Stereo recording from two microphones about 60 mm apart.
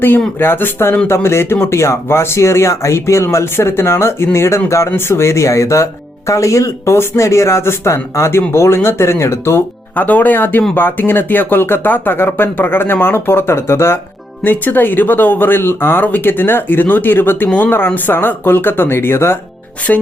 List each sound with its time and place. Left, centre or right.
0.3 s speech: left
4.9 s speech: left
9.9 s speech: left
14.4 s speech: left
19.9 s speech: left